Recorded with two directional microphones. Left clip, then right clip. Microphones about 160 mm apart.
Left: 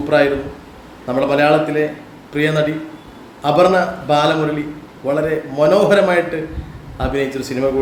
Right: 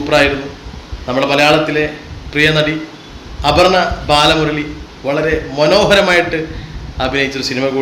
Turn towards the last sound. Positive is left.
turn(degrees=5)  # may be behind; listen again after turning